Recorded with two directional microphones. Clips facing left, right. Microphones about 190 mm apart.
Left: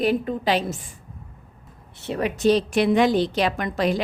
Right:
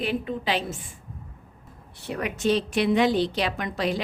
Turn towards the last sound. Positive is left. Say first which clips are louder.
# left 4 dB
turn(degrees=45)  # may be behind; listen again after turning